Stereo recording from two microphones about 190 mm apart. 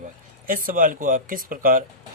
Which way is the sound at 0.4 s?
45° right (ahead or behind).